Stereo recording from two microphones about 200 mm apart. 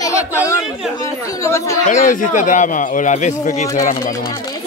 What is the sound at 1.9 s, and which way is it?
A man's voice, 40° left (ahead or behind).